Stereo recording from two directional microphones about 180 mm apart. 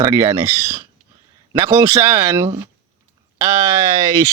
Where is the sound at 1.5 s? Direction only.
15° right (ahead or behind).